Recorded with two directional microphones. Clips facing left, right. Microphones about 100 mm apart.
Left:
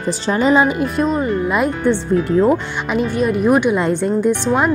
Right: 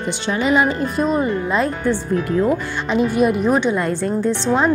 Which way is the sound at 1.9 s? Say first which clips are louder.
Left 5 dB; 20° left (ahead or behind).